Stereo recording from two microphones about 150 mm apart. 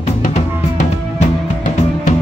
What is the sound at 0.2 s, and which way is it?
Drum kit, 55° left (ahead or behind).